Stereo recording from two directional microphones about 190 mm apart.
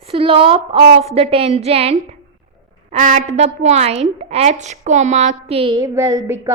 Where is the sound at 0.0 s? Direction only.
30° right (ahead or behind).